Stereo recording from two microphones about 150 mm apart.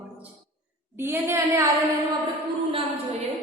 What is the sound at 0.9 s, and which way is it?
Speech, 15° right (ahead or behind).